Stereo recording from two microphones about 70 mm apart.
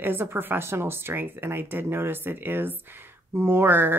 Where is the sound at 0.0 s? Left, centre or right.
Right.